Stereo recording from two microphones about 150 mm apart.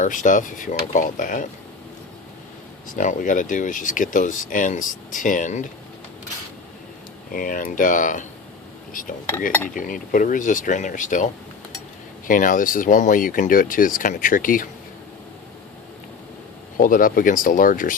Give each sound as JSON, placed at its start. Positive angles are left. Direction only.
{"t": 0.0, "sound": "speech", "side_deg": 60}
{"t": 2.9, "sound": "speech", "side_deg": 60}
{"t": 7.3, "sound": "speech", "side_deg": 65}
{"t": 12.3, "sound": "speech", "side_deg": 65}
{"t": 16.7, "sound": "speech", "side_deg": 65}